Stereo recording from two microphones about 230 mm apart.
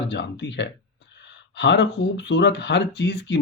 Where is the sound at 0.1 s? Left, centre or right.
Left.